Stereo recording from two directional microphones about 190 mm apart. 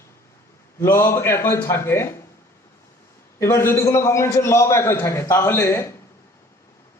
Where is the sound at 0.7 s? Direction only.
15° left (ahead or behind).